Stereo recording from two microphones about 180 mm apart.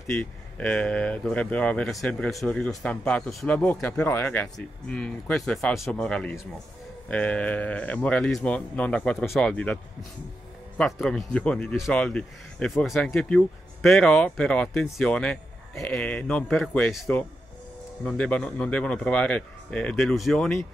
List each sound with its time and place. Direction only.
0.0 s speech: 5° left (ahead or behind)
10.8 s speech: centre (ahead or behind)